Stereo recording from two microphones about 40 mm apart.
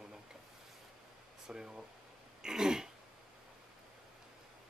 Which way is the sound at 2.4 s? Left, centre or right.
Centre.